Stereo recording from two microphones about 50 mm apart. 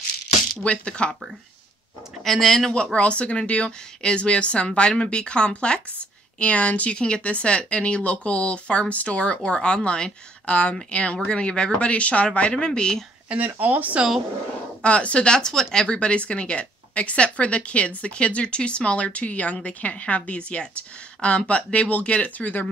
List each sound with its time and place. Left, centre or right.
0.7 s speech: left
2.2 s a man's voice: centre
2.7 s speech: left
13.3 s speech: right
14.8 s speech: left